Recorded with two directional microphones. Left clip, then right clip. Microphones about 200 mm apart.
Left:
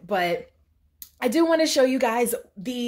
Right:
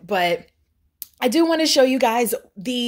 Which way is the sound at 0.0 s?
45° right (ahead or behind).